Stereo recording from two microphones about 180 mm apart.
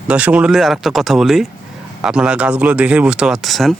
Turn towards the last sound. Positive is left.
turn(degrees=0)  # may be behind; listen again after turning